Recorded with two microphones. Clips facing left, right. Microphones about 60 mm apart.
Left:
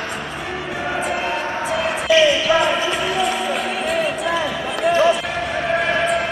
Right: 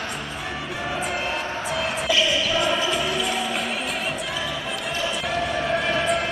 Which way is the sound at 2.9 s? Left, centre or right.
Centre.